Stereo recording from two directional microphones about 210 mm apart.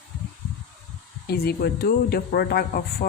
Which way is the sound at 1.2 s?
50° left (ahead or behind).